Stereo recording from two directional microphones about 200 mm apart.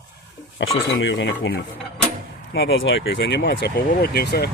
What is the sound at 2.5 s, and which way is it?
Speech, 65° left (ahead or behind).